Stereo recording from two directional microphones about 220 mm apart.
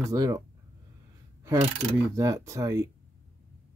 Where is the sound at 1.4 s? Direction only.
15° right (ahead or behind).